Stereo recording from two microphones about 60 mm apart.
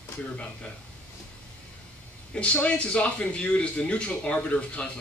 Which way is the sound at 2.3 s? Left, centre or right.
Left.